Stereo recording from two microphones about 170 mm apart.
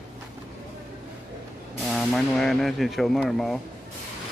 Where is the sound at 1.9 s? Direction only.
Centre (ahead or behind).